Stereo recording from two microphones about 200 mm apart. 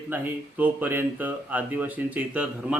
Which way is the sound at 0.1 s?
10° right (ahead or behind).